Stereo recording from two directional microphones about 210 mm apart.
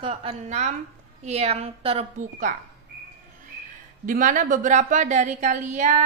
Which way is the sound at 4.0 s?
40° right (ahead or behind).